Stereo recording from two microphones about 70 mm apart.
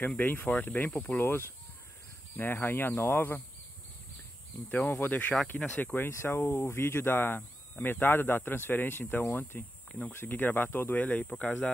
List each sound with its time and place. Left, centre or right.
0.0 s speech: left
4.6 s speech: left
6.0 s speech: left
6.7 s speech: left; by 11.7 s centre